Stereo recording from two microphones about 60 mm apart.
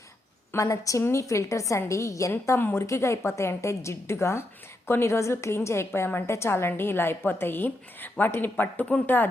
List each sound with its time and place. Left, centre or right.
0.5 s a woman's voice: left
2.3 s a woman's voice: left
2.8 s a woman's voice: left
8.8 s speech: left